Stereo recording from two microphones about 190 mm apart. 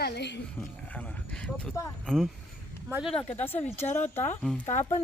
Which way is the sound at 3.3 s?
10° left (ahead or behind).